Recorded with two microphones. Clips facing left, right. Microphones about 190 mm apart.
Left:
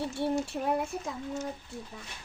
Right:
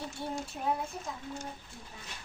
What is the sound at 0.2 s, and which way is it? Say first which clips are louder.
Speech: left 9 dB; 65° left (ahead or behind).